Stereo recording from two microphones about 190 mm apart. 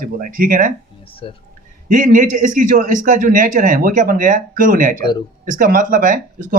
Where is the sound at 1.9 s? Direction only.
45° right (ahead or behind).